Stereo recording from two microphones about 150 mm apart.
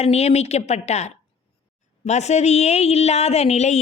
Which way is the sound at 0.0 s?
45° left (ahead or behind).